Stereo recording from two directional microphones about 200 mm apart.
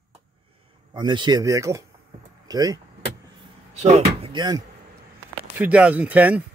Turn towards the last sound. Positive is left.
turn(degrees=-5)  # may be behind; listen again after turning